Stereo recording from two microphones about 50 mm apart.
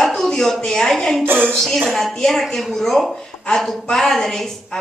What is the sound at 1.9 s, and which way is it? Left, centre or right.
Speech, centre.